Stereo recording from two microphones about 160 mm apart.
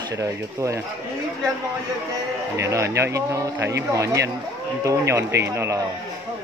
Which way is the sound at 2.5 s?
20° right (ahead or behind).